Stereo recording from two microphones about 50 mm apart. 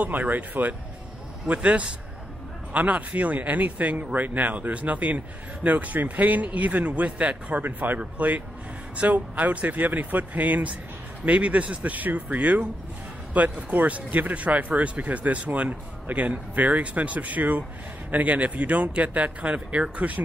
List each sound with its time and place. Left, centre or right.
0.0 s speech: right
7.6 s speech: right
8.0 s speech: right